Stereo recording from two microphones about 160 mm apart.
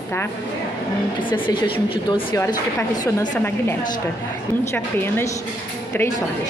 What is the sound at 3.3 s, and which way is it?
Speech, 10° left (ahead or behind).